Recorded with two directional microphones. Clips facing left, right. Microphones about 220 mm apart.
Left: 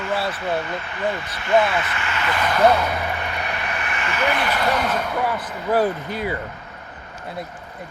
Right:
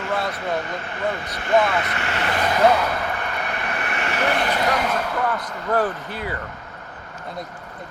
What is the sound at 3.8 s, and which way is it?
Vehicle, 60° right (ahead or behind).